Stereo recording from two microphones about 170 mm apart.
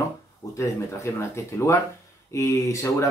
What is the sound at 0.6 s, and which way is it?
Speech, 15° left (ahead or behind).